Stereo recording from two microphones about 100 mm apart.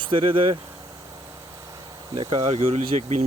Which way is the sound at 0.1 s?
60° right (ahead or behind).